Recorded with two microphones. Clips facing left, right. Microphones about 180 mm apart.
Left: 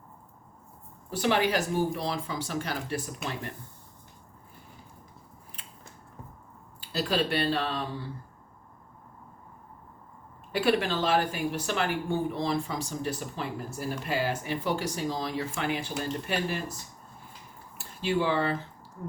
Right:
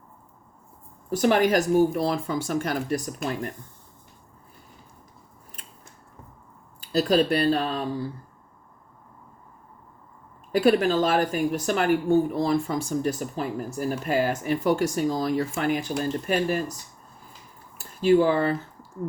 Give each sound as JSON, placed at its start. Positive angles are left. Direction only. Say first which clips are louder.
{"t": 1.1, "sound": "a woman's voice", "louder": "right 6 dB", "side_deg": -45}
{"t": 6.8, "sound": "speech", "louder": "right 7 dB", "side_deg": -40}
{"t": 10.5, "sound": "a woman's voice", "louder": "right 6 dB", "side_deg": -40}
{"t": 18.0, "sound": "speech", "louder": "right 8 dB", "side_deg": -45}